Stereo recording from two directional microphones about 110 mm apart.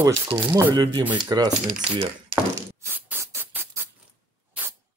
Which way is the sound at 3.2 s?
20° right (ahead or behind).